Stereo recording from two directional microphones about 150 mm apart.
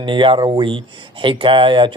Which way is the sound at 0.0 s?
35° right (ahead or behind).